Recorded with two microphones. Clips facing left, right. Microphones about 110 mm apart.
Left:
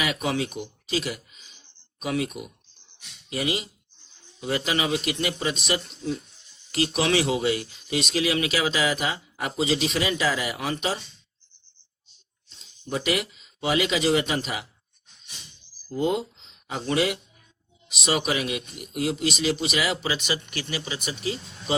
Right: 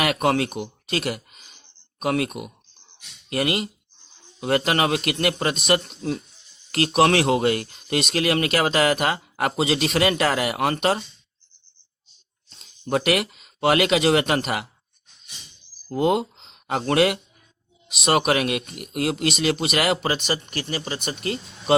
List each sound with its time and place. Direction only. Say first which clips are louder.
0.0 s speech: right 6 dB; 60° right (ahead or behind)
12.8 s speech: right 5 dB; 65° right (ahead or behind)
15.9 s speech: right 4 dB; 65° right (ahead or behind)